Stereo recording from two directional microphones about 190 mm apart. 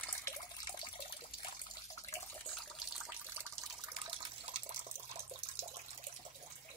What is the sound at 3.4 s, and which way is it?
Water, 25° right (ahead or behind).